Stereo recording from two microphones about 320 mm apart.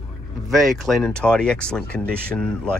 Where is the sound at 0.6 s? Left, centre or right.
Centre.